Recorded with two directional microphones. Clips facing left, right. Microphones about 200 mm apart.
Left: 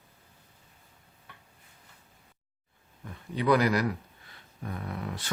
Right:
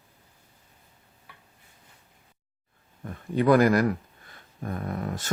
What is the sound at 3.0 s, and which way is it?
Speech, 50° right (ahead or behind).